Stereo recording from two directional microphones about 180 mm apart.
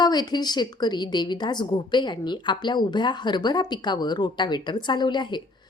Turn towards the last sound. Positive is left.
turn(degrees=25)  # may be behind; listen again after turning